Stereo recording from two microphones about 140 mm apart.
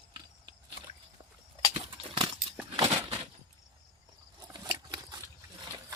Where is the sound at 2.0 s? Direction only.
40° right (ahead or behind).